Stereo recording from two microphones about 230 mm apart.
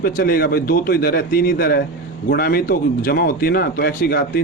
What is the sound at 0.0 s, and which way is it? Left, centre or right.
A man's voice, left.